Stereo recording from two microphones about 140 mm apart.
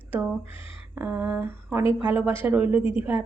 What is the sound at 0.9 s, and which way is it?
A woman's voice, 15° right (ahead or behind).